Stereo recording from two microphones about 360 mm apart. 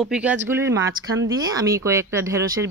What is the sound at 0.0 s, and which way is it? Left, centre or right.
Speech, centre.